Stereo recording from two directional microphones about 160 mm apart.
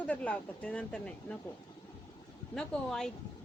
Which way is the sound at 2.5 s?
5° left (ahead or behind).